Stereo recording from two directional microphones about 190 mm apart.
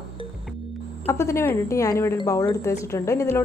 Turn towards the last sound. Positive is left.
turn(degrees=15)  # may be behind; listen again after turning